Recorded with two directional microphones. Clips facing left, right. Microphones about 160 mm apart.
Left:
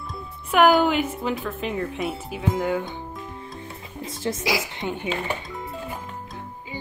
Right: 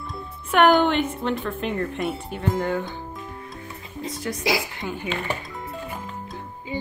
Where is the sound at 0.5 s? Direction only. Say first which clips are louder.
Even; centre (ahead or behind).